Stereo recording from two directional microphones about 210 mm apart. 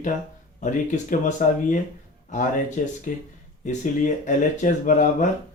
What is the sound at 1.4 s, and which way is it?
Speech, 40° left (ahead or behind).